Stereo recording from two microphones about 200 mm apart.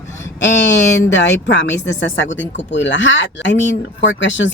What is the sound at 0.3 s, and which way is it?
Speech, 65° left (ahead or behind).